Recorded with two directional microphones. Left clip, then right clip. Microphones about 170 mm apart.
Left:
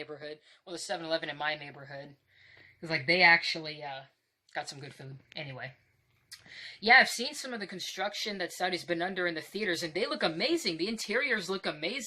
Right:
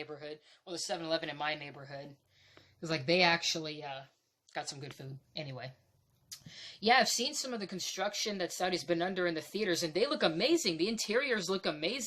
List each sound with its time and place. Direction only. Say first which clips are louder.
0.0 s speech: left 2 dB; 20° right (ahead or behind)